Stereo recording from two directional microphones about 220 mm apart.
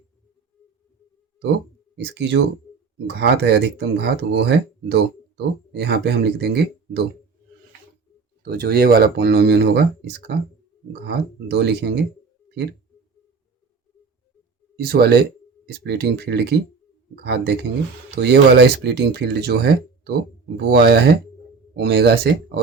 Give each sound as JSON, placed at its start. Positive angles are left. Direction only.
{"t": 2.1, "sound": "speech", "side_deg": -50}
{"t": 8.4, "sound": "speech", "side_deg": -45}
{"t": 14.8, "sound": "speech", "side_deg": -45}